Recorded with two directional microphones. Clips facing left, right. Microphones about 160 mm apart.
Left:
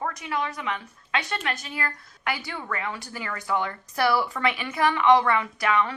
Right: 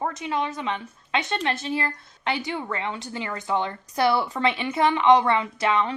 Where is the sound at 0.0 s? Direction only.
25° right (ahead or behind).